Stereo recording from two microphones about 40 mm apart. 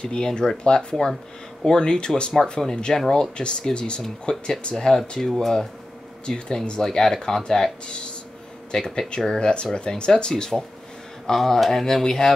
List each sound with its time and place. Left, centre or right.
0.0 s speech: left
6.2 s speech: left
7.8 s speech: left